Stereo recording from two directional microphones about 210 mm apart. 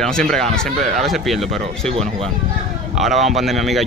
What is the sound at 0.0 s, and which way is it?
Speech, 5° left (ahead or behind).